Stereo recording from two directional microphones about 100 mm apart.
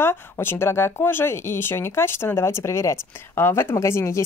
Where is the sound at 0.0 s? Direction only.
25° left (ahead or behind).